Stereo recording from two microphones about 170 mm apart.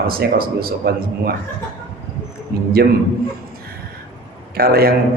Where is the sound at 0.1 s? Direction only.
60° right (ahead or behind).